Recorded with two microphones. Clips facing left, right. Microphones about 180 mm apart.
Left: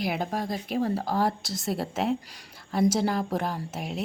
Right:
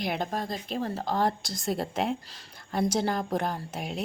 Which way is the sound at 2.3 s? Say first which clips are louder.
Left 1 dB; 15° left (ahead or behind).